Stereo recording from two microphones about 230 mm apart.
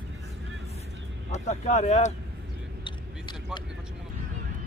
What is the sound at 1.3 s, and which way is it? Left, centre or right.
Speech, left.